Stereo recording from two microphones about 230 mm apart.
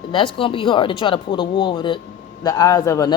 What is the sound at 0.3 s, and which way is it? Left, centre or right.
Speech, left.